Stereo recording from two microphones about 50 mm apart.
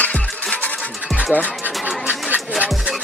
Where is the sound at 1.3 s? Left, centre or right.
Left.